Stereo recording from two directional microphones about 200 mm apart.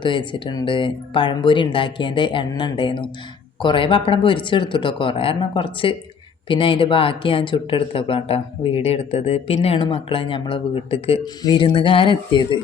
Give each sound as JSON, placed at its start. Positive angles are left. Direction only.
{"t": 0.0, "sound": "speech", "side_deg": 25}